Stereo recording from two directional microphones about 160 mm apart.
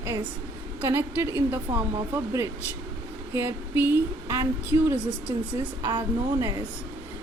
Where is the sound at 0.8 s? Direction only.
15° right (ahead or behind).